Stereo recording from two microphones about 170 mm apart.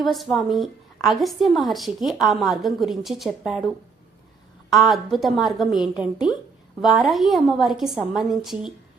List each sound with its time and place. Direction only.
0.0 s a woman's voice: centre (ahead or behind)